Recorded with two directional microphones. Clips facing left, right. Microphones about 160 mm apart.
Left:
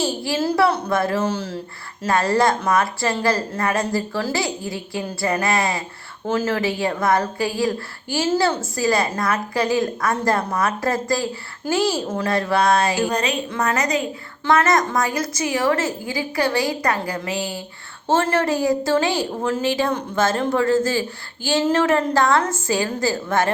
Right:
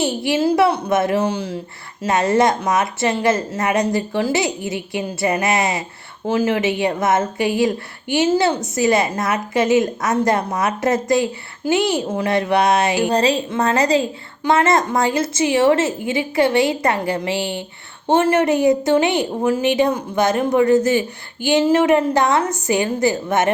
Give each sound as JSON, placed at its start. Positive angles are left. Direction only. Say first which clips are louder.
{"t": 0.0, "sound": "speech", "louder": "right 4 dB", "side_deg": -20}
{"t": 18.1, "sound": "speech", "louder": "right 4 dB", "side_deg": -15}